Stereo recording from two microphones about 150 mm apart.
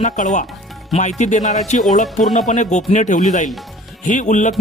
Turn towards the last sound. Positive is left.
turn(degrees=55)  # may be behind; listen again after turning